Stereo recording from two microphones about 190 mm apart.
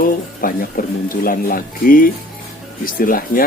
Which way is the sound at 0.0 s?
45° left (ahead or behind).